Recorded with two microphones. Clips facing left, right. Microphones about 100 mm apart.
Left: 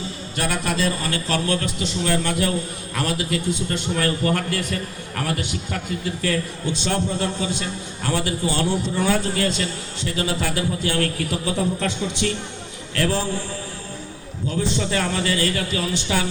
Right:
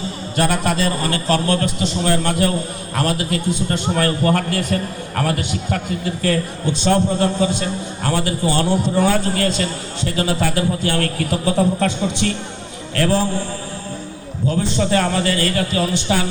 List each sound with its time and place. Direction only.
0.3 s a man's voice: 35° right (ahead or behind)
14.5 s a man's voice: 40° right (ahead or behind)